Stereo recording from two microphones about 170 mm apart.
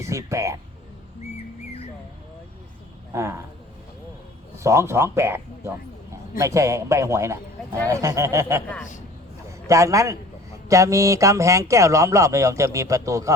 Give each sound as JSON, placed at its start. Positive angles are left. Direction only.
{"t": 0.0, "sound": "speech", "side_deg": -15}
{"t": 3.1, "sound": "speech", "side_deg": -15}
{"t": 4.6, "sound": "speech", "side_deg": -15}
{"t": 9.6, "sound": "speech", "side_deg": -20}